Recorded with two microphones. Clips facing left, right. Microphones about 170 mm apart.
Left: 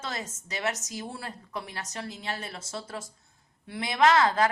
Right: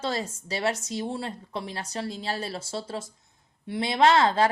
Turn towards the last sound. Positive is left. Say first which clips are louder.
# right 2 dB
turn(degrees=-30)  # may be behind; listen again after turning